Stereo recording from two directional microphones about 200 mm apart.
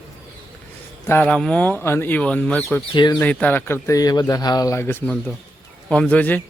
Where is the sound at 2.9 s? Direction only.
20° left (ahead or behind).